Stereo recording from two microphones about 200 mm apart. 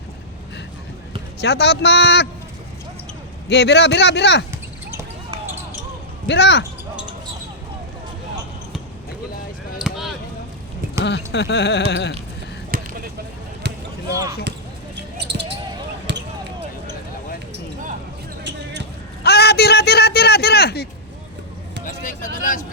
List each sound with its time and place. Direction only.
1.4 s a man's voice: 55° left (ahead or behind)
3.5 s a man's voice: 60° left (ahead or behind)
4.9 s basketball bounce: 15° right (ahead or behind)
6.2 s a man's voice: 60° left (ahead or behind)
9.8 s a sound: centre (ahead or behind)
11.3 s a man's voice: 60° left (ahead or behind)
12.7 s a sound: 45° right (ahead or behind)
14.1 s speech: 15° right (ahead or behind)
15.2 s basketball bounce: 60° right (ahead or behind)
19.2 s a man's voice: 55° left (ahead or behind)
21.8 s vehicle: 40° left (ahead or behind)